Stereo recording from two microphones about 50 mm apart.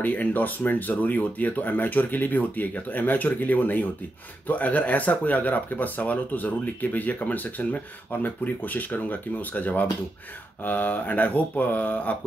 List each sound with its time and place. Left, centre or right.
0.0 s speech: left